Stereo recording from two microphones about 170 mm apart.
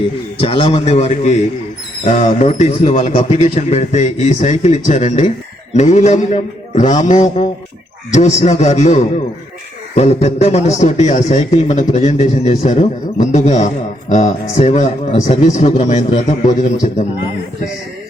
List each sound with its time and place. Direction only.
0.3 s a man's voice: 35° left (ahead or behind)